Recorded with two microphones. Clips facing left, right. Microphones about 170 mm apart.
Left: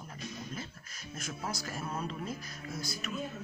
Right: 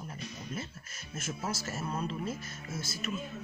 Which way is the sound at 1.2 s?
5° right (ahead or behind).